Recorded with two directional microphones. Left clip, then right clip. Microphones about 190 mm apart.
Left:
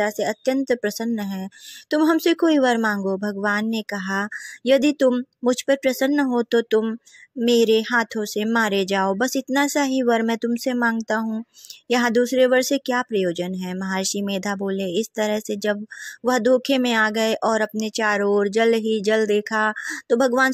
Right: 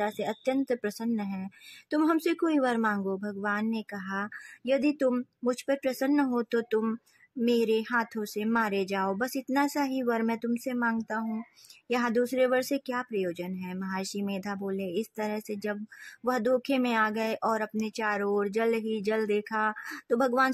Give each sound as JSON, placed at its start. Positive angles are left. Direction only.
{"t": 0.0, "sound": "speech", "side_deg": 20}